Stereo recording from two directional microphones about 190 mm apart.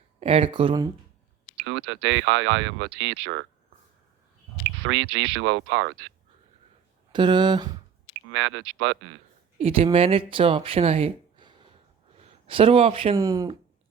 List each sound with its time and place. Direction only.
0.2 s speech: 30° right (ahead or behind)
1.6 s speech: 80° right
4.8 s speech: 80° right
7.1 s speech: 25° right (ahead or behind)
8.3 s speech: 80° right
9.6 s speech: 30° right (ahead or behind)
13.1 s speech: 20° right (ahead or behind)